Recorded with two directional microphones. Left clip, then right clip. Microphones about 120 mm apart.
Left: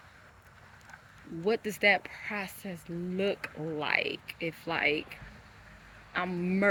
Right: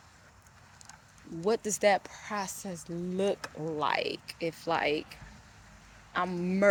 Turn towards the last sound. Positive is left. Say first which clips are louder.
# right 1 dB
turn(degrees=30)  # may be behind; listen again after turning